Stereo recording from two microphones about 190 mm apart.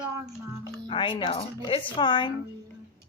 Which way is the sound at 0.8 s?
25° left (ahead or behind).